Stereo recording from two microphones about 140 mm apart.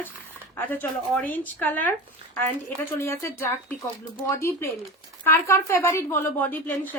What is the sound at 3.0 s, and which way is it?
A woman's voice, 20° left (ahead or behind).